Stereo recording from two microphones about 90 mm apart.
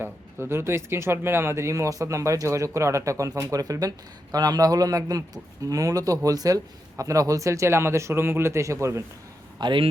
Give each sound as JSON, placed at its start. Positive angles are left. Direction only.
{"t": 0.0, "sound": "speech", "side_deg": -25}
{"t": 9.6, "sound": "speech", "side_deg": -65}